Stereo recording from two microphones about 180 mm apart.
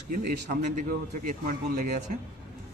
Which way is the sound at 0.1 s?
55° right (ahead or behind).